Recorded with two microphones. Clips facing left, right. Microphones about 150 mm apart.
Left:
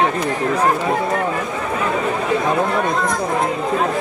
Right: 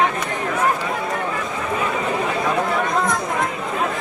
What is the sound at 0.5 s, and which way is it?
Speech, 35° left (ahead or behind).